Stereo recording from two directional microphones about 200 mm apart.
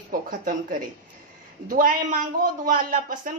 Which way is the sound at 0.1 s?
45° right (ahead or behind).